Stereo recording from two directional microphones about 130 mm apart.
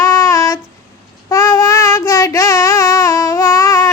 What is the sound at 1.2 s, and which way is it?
Child singing, 20° left (ahead or behind).